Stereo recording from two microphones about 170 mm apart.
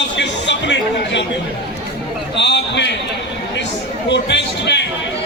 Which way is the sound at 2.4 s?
90° left.